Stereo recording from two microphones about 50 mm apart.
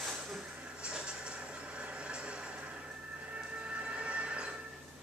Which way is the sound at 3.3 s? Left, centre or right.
Right.